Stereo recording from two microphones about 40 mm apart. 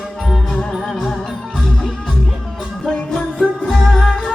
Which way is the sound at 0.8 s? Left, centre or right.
Centre.